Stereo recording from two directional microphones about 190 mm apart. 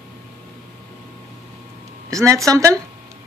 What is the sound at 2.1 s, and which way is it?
Speech, 15° right (ahead or behind).